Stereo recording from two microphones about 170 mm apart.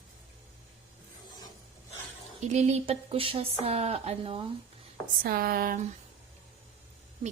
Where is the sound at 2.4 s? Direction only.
40° right (ahead or behind).